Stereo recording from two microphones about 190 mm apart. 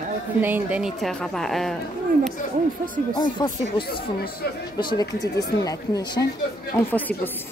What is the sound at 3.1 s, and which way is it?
Speech, 25° left (ahead or behind).